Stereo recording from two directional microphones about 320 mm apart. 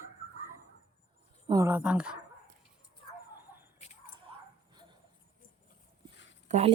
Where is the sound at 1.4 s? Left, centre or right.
Centre.